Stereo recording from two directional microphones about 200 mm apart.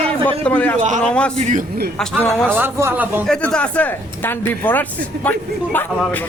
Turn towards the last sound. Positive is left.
turn(degrees=10)  # may be behind; listen again after turning